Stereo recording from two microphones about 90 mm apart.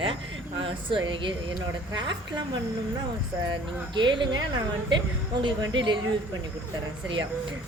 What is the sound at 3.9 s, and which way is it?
Speech, 60° right (ahead or behind).